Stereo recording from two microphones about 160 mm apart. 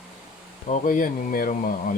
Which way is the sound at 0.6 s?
50° left (ahead or behind).